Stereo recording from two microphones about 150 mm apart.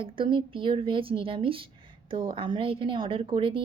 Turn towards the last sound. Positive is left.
turn(degrees=-35)  # may be behind; listen again after turning